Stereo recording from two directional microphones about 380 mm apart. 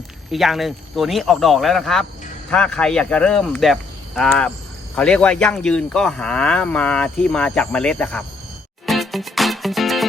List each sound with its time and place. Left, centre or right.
0.3 s speech: centre
8.9 s music: centre